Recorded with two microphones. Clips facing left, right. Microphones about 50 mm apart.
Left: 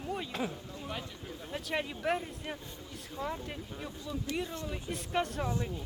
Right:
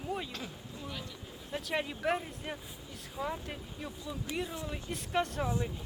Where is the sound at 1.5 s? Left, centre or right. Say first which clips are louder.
Right 1 dB; centre.